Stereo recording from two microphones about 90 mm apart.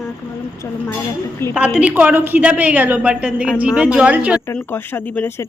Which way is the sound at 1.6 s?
10° right (ahead or behind).